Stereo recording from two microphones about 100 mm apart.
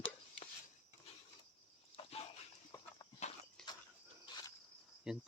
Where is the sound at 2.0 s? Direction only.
80° left.